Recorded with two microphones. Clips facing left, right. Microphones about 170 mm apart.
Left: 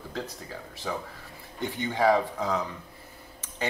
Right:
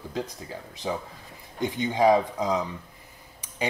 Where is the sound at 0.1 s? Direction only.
15° right (ahead or behind).